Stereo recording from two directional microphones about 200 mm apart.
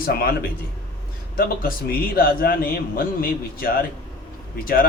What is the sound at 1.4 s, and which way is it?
A man's voice, 45° left (ahead or behind).